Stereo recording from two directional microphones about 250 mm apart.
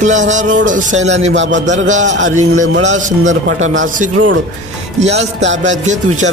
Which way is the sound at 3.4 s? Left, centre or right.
Right.